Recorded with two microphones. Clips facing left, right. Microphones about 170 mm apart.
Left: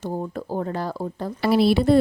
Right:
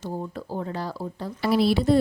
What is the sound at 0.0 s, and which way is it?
Speech, 50° left (ahead or behind).